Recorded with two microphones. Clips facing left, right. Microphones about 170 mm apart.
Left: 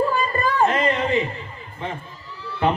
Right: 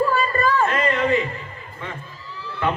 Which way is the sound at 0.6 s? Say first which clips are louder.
Left 2 dB; 20° left (ahead or behind).